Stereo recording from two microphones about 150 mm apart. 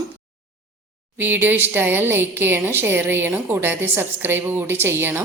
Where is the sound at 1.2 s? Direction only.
15° right (ahead or behind).